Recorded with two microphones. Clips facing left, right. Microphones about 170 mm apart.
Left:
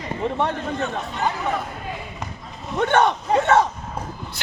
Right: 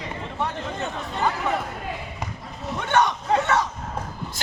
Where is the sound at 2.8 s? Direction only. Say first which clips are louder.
Left 4 dB; 55° left (ahead or behind).